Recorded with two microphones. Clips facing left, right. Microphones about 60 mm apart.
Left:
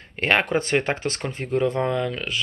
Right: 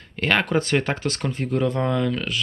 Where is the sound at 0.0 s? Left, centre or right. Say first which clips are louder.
Left 1 dB; left.